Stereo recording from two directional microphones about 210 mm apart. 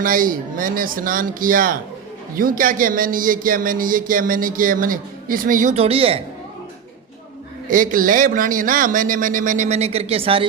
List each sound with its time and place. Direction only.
0.0 s speech: 40° right (ahead or behind)
7.7 s speech: 40° right (ahead or behind)